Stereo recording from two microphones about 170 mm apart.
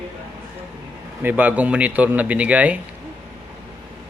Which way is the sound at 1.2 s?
10° right (ahead or behind).